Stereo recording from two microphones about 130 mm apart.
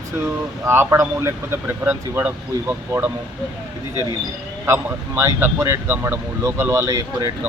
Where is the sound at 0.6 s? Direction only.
20° right (ahead or behind).